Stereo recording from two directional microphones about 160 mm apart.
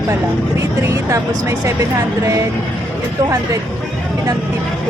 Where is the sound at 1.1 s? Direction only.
20° right (ahead or behind).